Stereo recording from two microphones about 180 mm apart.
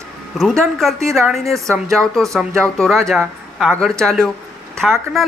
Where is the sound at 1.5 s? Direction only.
15° right (ahead or behind).